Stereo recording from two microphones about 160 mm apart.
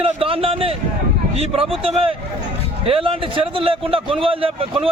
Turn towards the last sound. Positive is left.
turn(degrees=-35)  # may be behind; listen again after turning